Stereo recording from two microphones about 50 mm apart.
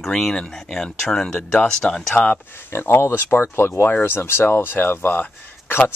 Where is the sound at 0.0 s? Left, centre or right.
Centre.